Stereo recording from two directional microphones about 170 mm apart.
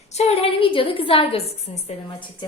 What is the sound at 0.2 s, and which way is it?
A woman's voice, 35° left (ahead or behind).